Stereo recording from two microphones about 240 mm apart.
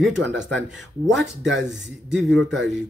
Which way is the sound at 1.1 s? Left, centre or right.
Right.